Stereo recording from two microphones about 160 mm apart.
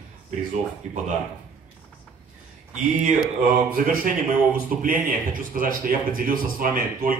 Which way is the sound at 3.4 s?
60° right (ahead or behind).